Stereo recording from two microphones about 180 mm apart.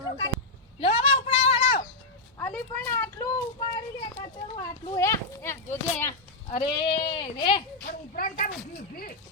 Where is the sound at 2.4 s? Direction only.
10° left (ahead or behind).